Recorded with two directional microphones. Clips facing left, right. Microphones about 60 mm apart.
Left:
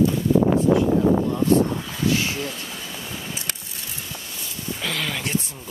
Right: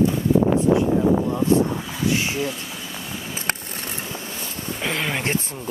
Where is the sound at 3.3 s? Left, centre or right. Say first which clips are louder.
Right 6 dB; right.